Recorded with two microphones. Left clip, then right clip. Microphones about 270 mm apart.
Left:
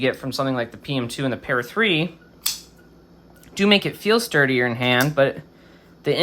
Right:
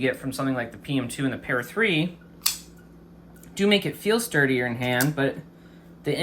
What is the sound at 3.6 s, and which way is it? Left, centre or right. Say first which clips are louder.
Speech: left 4 dB; centre.